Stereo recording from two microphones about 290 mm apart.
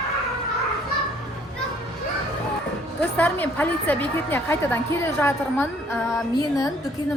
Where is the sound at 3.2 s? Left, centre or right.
Centre.